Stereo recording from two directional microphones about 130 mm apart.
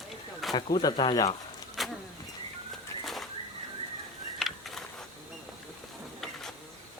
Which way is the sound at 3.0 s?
Centre (ahead or behind).